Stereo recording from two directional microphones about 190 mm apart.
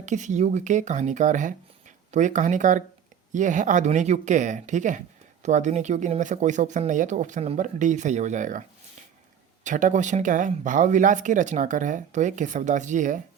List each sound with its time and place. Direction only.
0.0 s speech: 40° right (ahead or behind)
9.6 s speech: 40° right (ahead or behind)